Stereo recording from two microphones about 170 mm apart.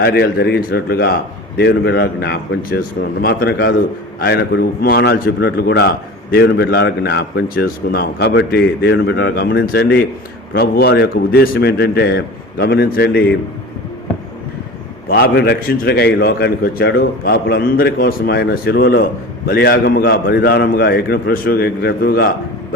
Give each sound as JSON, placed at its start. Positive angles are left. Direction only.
{"t": 0.0, "sound": "a man's voice", "side_deg": 70}
{"t": 1.5, "sound": "a man's voice", "side_deg": 80}
{"t": 3.2, "sound": "a man's voice", "side_deg": 65}
{"t": 10.5, "sound": "a man's voice", "side_deg": 65}
{"t": 15.0, "sound": "a man's voice", "side_deg": 65}